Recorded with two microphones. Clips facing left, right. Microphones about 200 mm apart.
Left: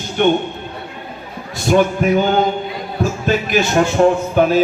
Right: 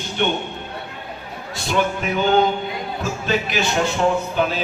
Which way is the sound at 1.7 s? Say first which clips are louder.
Left 8 dB; 50° left (ahead or behind).